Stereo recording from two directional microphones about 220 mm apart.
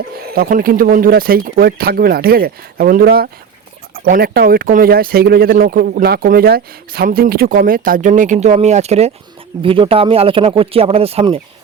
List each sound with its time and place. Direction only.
0.3 s speech: 40° right (ahead or behind)